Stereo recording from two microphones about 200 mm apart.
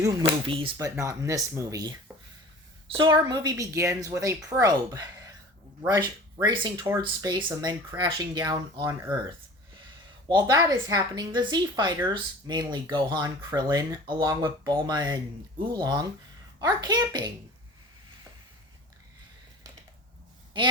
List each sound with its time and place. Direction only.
0.2 s a woman's voice: 25° right (ahead or behind)
0.9 s a woman's voice: 15° right (ahead or behind)
10.2 s a woman's voice: 20° right (ahead or behind)